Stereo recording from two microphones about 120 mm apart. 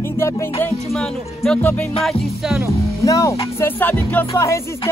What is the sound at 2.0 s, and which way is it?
Music, 5° right (ahead or behind).